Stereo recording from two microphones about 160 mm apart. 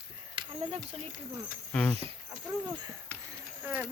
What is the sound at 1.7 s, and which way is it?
Speech, 10° left (ahead or behind).